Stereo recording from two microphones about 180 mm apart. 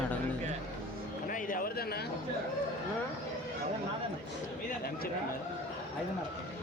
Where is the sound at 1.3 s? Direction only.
50° left (ahead or behind).